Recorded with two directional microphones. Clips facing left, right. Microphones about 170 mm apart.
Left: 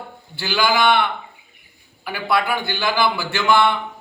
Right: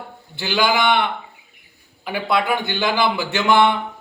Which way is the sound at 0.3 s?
20° right (ahead or behind).